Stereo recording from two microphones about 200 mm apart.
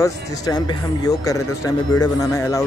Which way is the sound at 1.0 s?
15° left (ahead or behind).